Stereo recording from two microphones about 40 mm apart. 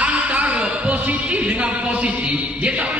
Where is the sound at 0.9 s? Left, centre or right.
Right.